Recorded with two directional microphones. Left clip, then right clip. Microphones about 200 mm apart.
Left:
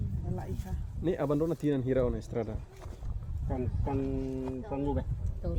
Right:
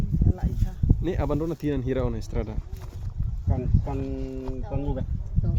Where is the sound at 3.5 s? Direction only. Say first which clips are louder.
Right 3 dB; 25° right (ahead or behind).